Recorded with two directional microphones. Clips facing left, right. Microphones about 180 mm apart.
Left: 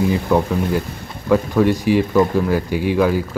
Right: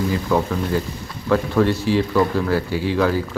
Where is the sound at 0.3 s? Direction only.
20° left (ahead or behind).